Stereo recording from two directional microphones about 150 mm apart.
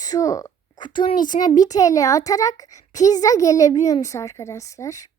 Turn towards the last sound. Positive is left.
turn(degrees=20)  # may be behind; listen again after turning